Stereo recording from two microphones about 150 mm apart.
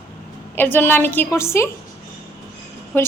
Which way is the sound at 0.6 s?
15° left (ahead or behind).